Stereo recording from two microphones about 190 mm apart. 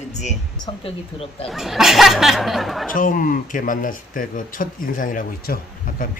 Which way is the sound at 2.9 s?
45° left (ahead or behind).